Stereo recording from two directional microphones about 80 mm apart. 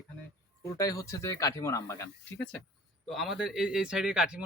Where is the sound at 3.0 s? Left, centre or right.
Centre.